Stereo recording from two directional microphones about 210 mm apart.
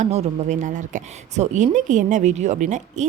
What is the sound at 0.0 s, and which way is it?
Speech, 35° right (ahead or behind).